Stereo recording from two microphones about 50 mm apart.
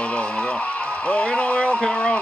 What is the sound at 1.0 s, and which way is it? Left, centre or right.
Speech, left.